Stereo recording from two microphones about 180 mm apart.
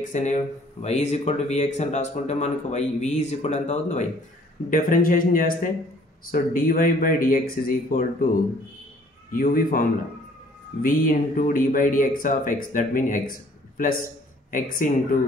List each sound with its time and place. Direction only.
0.0 s speech: 40° left (ahead or behind)
9.3 s speech: 50° left (ahead or behind)